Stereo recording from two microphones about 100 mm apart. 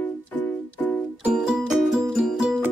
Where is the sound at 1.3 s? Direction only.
5° right (ahead or behind).